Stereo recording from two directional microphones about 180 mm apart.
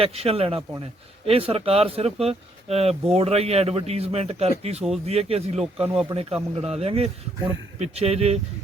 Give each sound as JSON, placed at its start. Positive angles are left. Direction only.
{"t": 0.0, "sound": "speech", "side_deg": -30}